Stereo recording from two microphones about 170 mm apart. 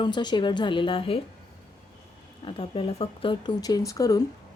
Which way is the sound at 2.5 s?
30° left (ahead or behind).